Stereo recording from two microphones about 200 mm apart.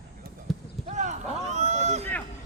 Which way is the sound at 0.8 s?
35° right (ahead or behind).